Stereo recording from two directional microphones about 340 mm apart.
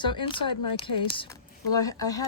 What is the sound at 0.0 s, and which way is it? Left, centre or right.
Speech, centre.